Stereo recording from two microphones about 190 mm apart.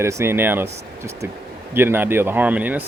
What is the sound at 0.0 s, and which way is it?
Speech, 15° right (ahead or behind).